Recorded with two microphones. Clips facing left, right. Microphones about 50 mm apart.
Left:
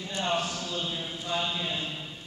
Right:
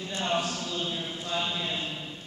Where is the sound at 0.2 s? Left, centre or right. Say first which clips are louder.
Even; centre.